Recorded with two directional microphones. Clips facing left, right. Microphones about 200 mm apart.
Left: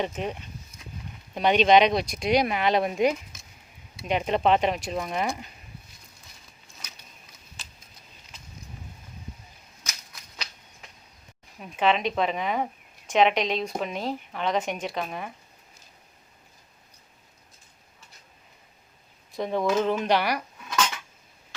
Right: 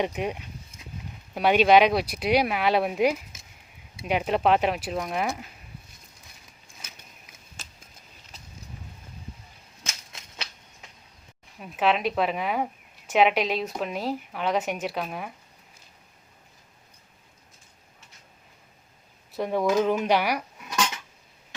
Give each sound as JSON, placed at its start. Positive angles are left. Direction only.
{"t": 0.0, "sound": "a woman's voice", "side_deg": -10}
{"t": 7.6, "sound": "a sound", "side_deg": -45}
{"t": 9.8, "sound": "typewriter", "side_deg": -25}
{"t": 11.6, "sound": "a woman's voice", "side_deg": -5}
{"t": 19.4, "sound": "speech", "side_deg": -10}